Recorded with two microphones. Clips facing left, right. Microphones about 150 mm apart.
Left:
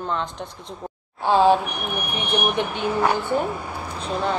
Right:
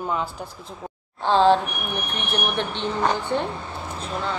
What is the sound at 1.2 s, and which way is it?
Speech, 10° left (ahead or behind).